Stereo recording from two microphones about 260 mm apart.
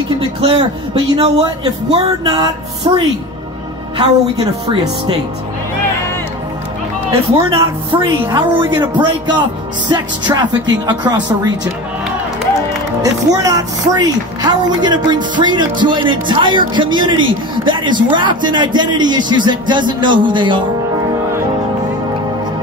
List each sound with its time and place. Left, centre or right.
0.4 s speech: centre
7.3 s a woman's voice: centre
13.0 s a woman's voice: centre